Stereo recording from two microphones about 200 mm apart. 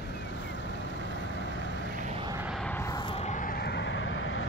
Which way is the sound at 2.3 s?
5° right (ahead or behind).